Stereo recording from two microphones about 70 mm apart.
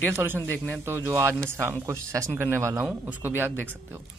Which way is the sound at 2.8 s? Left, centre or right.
Right.